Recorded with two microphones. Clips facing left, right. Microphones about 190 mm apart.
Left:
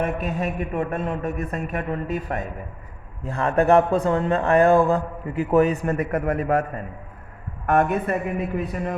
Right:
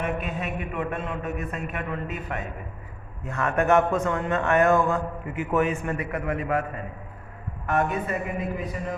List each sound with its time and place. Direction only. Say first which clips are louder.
0.0 s a man's voice: left 4 dB; 40° left (ahead or behind)
7.7 s speech: left 5 dB; 50° left (ahead or behind)